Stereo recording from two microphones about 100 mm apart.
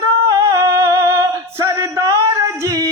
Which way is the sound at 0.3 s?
35° right (ahead or behind).